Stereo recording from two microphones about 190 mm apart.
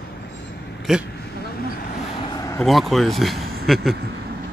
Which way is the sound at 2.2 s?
20° left (ahead or behind).